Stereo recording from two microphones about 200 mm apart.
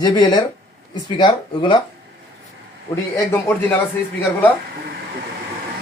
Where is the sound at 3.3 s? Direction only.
10° left (ahead or behind).